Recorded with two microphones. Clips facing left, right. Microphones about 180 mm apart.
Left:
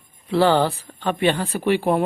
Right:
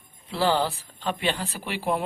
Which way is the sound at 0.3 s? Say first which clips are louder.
Left 7 dB; 60° left (ahead or behind).